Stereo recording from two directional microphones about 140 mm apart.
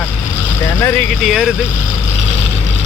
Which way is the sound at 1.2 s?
Centre (ahead or behind).